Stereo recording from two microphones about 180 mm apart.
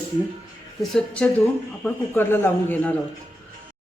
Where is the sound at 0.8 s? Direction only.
5° left (ahead or behind).